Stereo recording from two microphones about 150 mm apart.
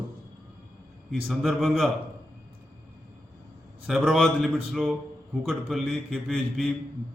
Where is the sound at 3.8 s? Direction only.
Centre (ahead or behind).